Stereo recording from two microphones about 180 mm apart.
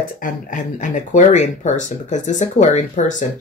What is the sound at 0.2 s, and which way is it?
Speech, 45° left (ahead or behind).